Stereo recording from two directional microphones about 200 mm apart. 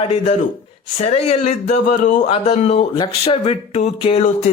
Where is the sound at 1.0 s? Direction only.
30° left (ahead or behind).